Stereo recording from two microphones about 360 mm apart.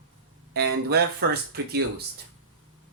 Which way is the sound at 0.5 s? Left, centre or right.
Right.